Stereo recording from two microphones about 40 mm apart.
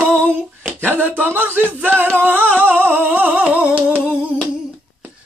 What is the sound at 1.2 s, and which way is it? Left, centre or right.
Music, right.